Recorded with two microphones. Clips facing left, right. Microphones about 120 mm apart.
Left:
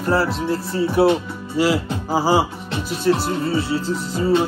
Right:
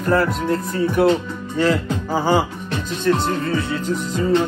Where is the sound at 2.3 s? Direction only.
25° left (ahead or behind).